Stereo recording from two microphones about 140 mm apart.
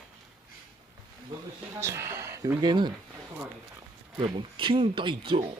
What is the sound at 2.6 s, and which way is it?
Speech, 30° right (ahead or behind).